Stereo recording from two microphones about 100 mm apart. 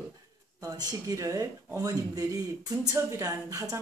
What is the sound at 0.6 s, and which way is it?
Speech, 40° right (ahead or behind).